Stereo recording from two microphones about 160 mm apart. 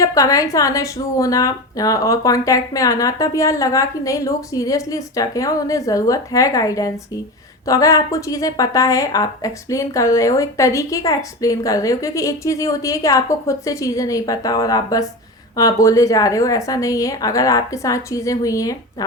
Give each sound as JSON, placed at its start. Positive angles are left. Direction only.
{"t": 0.0, "sound": "a woman's voice", "side_deg": 20}